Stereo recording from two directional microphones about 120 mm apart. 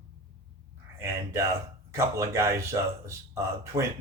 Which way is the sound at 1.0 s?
25° right (ahead or behind).